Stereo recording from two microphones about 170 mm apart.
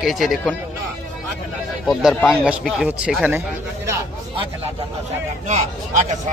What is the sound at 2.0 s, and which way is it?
Speech, centre (ahead or behind).